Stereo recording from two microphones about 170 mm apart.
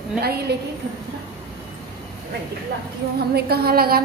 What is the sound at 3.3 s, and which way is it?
Speech, 65° right (ahead or behind).